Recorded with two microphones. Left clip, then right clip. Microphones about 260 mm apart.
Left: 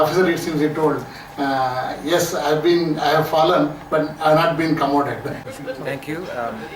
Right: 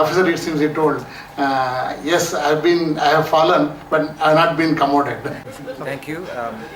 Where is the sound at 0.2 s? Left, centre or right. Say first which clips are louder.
Right 1 dB; centre.